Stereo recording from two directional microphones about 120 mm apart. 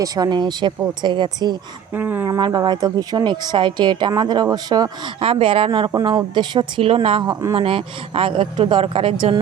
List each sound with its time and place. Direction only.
0.0 s a woman's voice: 35° right (ahead or behind)
1.9 s speech: 15° right (ahead or behind)
2.4 s a woman's voice: 35° right (ahead or behind)
5.2 s speech: 50° right (ahead or behind)
5.9 s a woman's voice: 35° right (ahead or behind); by 9.3 s 50° right (ahead or behind)